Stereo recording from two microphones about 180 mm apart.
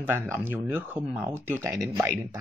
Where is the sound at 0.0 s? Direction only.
10° right (ahead or behind).